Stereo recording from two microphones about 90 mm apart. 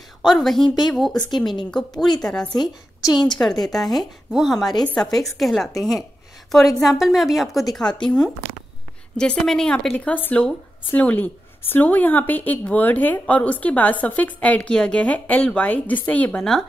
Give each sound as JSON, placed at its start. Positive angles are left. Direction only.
{"t": 0.2, "sound": "speech", "side_deg": 0}
{"t": 0.7, "sound": "speech", "side_deg": 55}
{"t": 0.9, "sound": "a woman's voice", "side_deg": 0}
{"t": 2.5, "sound": "a woman's voice", "side_deg": 50}
{"t": 3.3, "sound": "a woman's voice", "side_deg": 5}
{"t": 9.1, "sound": "a woman's voice", "side_deg": 10}